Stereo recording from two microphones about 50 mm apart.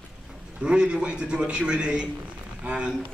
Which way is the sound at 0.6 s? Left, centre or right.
Right.